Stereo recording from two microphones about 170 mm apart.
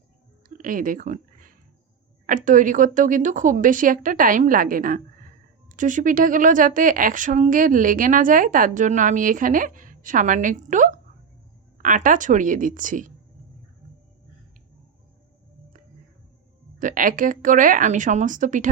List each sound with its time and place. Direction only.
0.4 s a sound: 50° right (ahead or behind)
2.2 s a woman's voice: 50° right (ahead or behind)
16.8 s a woman's voice: 50° right (ahead or behind)